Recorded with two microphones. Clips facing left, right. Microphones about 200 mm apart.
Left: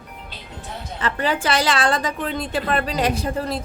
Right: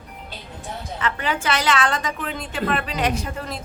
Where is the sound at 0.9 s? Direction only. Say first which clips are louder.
Left 3 dB; 35° left (ahead or behind).